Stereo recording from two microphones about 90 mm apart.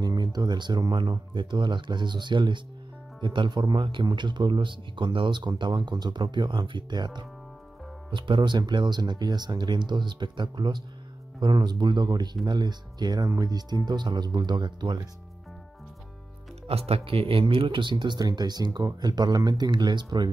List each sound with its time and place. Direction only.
0.0 s speech: 50° right (ahead or behind)
1.3 s speech: 60° right (ahead or behind)
8.1 s speech: 65° right (ahead or behind)
16.6 s speech: 90° right; by 20.2 s 55° right (ahead or behind)